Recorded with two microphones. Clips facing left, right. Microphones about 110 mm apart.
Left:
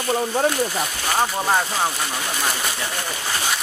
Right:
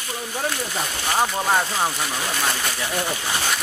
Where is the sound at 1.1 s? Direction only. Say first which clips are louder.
Even; centre (ahead or behind).